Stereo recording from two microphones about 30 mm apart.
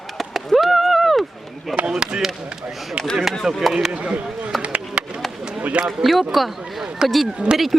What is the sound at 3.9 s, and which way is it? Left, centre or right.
Speech, right.